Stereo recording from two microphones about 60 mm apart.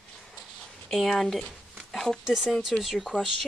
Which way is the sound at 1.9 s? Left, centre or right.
Centre.